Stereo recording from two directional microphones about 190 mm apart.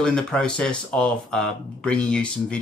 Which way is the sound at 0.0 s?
5° left (ahead or behind).